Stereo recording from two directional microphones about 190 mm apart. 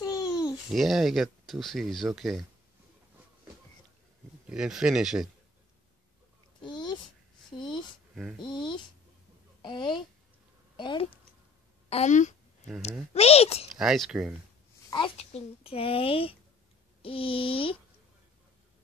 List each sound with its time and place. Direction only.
0.0 s babbling: 20° left (ahead or behind)
0.7 s speech: centre (ahead or behind)
4.5 s speech: 5° right (ahead or behind)
6.6 s a sound: 25° left (ahead or behind)
8.1 s speech: centre (ahead or behind)
8.4 s a sound: 25° left (ahead or behind)
11.9 s speech: 40° left (ahead or behind)
13.7 s speech: centre (ahead or behind)
14.9 s a child's voice: 30° left (ahead or behind)